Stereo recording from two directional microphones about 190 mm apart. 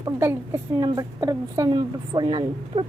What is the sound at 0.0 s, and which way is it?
A woman's voice, 15° right (ahead or behind).